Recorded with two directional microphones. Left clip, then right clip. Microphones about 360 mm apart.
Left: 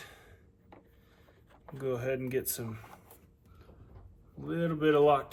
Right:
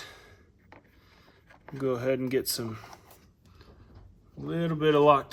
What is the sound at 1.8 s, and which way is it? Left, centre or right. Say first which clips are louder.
Speech: right 5 dB; right.